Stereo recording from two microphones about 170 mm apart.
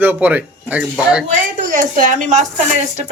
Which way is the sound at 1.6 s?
55° right (ahead or behind).